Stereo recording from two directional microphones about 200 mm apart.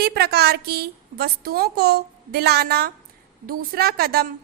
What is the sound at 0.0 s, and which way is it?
A woman's voice, 50° right (ahead or behind).